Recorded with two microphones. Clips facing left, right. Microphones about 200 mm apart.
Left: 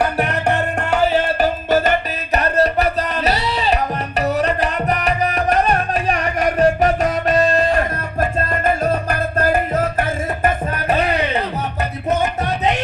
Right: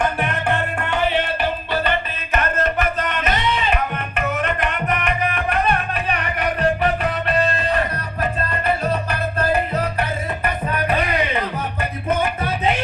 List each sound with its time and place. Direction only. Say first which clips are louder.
0.0 s music: left 3 dB; 40° left (ahead or behind)